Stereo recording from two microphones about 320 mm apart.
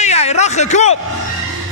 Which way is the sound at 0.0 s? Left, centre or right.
Left.